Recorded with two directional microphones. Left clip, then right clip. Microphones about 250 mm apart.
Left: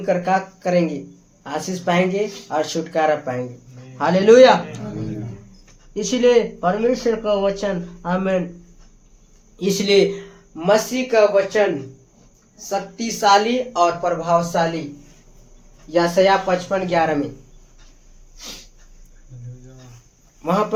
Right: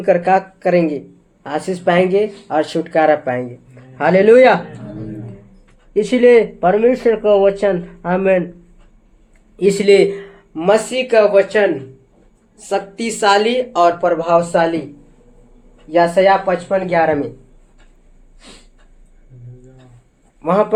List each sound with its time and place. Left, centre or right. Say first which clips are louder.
0.0 s speech: right 6 dB; right
5.9 s speech: right 5 dB; right
9.6 s speech: right 5 dB; right
12.6 s speech: right 5 dB; right
15.9 s speech: right 4 dB; right